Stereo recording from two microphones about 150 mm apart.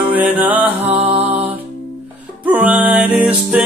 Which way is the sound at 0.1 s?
10° right (ahead or behind).